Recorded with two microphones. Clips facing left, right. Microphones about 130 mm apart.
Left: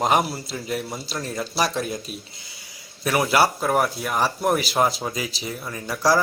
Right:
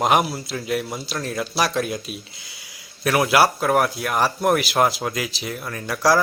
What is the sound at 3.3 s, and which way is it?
Speech, centre (ahead or behind).